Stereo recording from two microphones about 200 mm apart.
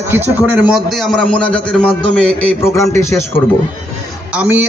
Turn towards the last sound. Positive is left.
turn(degrees=-10)  # may be behind; listen again after turning